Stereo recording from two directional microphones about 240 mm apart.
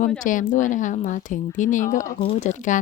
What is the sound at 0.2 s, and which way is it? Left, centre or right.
A woman's voice, left.